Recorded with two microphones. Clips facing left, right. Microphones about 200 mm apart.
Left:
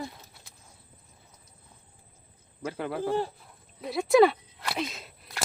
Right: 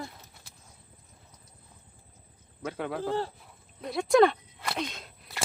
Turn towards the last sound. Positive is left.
turn(degrees=5)  # may be behind; listen again after turning